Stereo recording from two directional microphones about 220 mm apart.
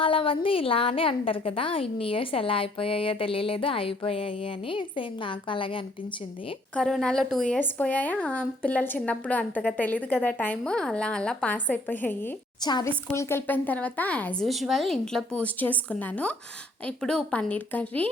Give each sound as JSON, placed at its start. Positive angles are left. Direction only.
{"t": 0.0, "sound": "a woman's voice", "side_deg": 25}
{"t": 6.7, "sound": "a woman's voice", "side_deg": 0}